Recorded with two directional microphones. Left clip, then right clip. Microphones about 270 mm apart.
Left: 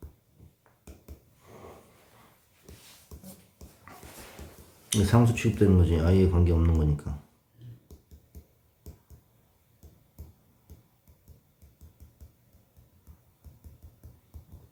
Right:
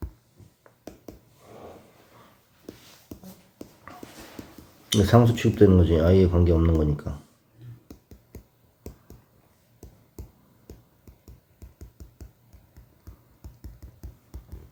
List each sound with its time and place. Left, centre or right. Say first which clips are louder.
4.9 s speech: right 6 dB; centre